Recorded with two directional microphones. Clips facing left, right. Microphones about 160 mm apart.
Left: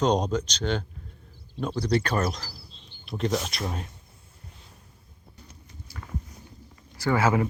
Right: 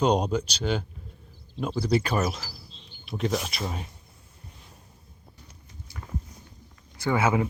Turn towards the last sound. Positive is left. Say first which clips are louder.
# left 1 dB
turn(degrees=-15)  # may be behind; listen again after turning